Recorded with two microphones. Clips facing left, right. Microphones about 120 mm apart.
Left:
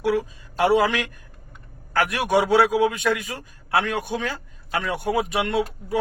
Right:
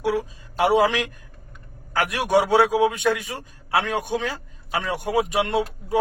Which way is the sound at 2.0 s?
25° right (ahead or behind).